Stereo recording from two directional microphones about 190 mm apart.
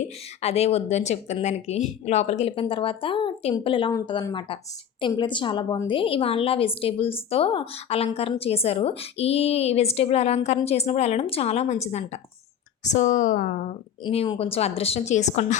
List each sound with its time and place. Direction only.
0.4 s a woman's voice: 35° left (ahead or behind)
14.0 s a woman's voice: 30° left (ahead or behind)